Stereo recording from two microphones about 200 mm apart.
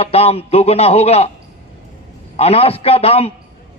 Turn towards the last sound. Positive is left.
turn(degrees=30)  # may be behind; listen again after turning